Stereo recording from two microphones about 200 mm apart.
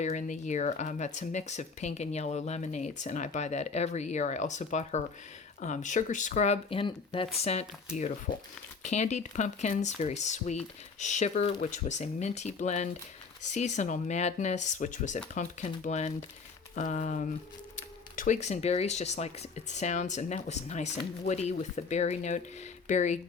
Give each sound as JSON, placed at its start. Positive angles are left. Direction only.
{"t": 0.0, "sound": "speech", "side_deg": 35}
{"t": 8.8, "sound": "speech", "side_deg": 35}